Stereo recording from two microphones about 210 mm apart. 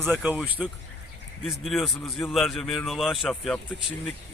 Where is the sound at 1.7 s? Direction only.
Centre (ahead or behind).